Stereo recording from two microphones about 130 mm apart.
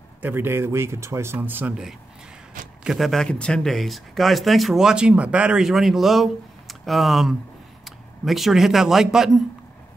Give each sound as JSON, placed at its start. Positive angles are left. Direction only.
{"t": 0.2, "sound": "speech", "side_deg": -15}
{"t": 2.8, "sound": "a man's voice", "side_deg": 0}